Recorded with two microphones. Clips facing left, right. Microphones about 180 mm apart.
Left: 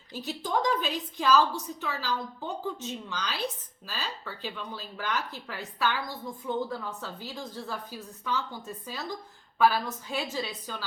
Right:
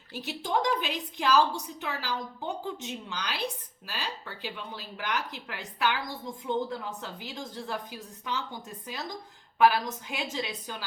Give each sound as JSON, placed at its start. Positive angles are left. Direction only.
{"t": 0.2, "sound": "a woman's voice", "side_deg": 35}
{"t": 0.6, "sound": "speech", "side_deg": -15}